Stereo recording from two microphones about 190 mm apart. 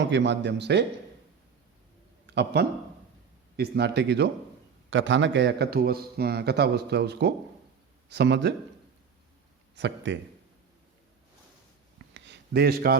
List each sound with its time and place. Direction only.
0.0 s speech: 70° right (ahead or behind)
2.2 s a man's voice: 65° right (ahead or behind)
4.9 s a man's voice: 85° right; by 8.5 s 65° right (ahead or behind)
9.7 s speech: 70° right (ahead or behind)
12.1 s a sound: 70° right (ahead or behind)